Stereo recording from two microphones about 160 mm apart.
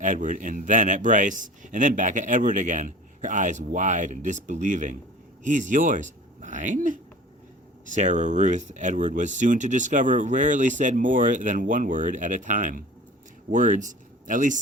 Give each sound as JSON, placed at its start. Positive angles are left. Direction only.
{"t": 0.0, "sound": "speech", "side_deg": -50}